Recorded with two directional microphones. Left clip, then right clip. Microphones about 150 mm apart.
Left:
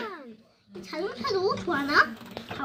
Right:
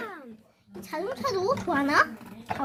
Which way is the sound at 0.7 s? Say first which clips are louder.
Right 1 dB; 5° right (ahead or behind).